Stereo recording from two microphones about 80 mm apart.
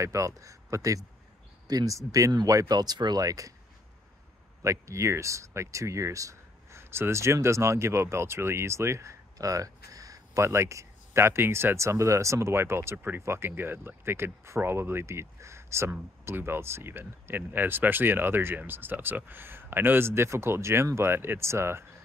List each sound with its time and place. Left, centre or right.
0.0 s speech: right
4.6 s speech: right